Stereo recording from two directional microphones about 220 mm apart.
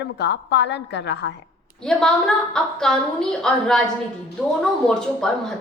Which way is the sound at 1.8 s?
5° left (ahead or behind).